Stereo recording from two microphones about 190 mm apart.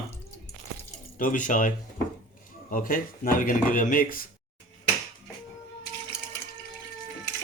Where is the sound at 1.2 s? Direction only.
45° left (ahead or behind).